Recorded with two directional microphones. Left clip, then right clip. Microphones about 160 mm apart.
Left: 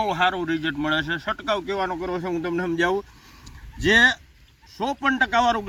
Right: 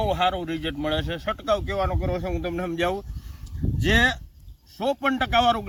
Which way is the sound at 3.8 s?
40° right (ahead or behind).